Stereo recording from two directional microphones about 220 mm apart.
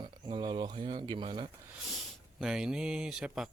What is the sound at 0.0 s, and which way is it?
Speech, 20° right (ahead or behind).